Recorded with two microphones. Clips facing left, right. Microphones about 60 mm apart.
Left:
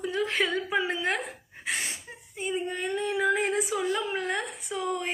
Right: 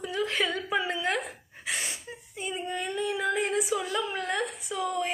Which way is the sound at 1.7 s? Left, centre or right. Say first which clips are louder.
Left 1 dB; left.